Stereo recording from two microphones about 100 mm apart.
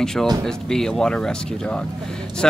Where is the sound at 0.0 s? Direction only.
5° left (ahead or behind).